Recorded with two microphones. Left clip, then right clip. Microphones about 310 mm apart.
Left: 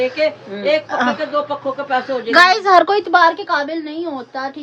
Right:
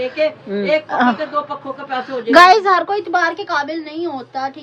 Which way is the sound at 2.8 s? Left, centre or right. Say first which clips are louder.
Left 4 dB; left.